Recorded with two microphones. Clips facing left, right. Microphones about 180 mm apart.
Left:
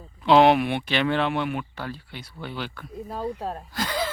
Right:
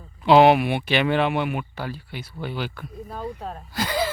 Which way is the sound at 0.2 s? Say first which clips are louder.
Right 2 dB; 5° right (ahead or behind).